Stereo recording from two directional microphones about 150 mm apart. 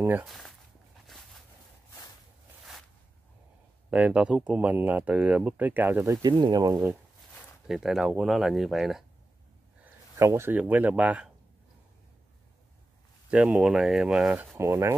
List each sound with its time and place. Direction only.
0.0 s speech: 10° right (ahead or behind)
0.3 s speech: centre (ahead or behind)
3.9 s speech: 10° right (ahead or behind)
6.2 s speech: 25° right (ahead or behind)
7.6 s speech: centre (ahead or behind)
10.1 s speech: 20° right (ahead or behind)
13.3 s speech: 5° right (ahead or behind)
14.6 s speech: 20° right (ahead or behind)